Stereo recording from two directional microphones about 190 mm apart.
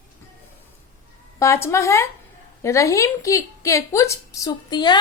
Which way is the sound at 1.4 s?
15° left (ahead or behind).